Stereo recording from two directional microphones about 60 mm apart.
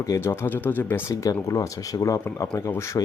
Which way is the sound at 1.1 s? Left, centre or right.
Left.